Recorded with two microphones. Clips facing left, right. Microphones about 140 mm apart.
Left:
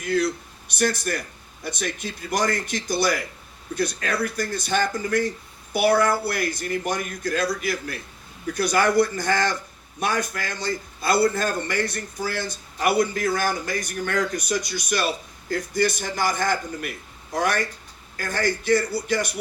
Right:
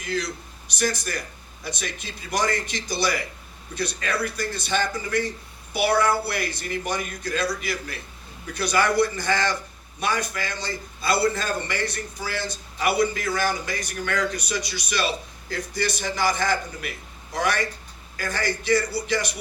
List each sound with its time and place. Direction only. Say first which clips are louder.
0.0 s speech: left 6 dB; 60° left (ahead or behind)